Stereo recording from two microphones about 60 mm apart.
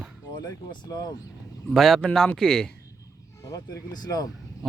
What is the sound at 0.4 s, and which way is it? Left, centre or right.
Speech, left.